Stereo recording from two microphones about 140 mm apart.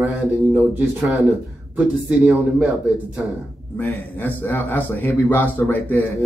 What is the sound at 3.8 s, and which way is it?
A man's voice, 10° left (ahead or behind).